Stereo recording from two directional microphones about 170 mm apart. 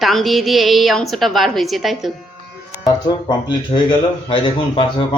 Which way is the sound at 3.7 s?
30° left (ahead or behind).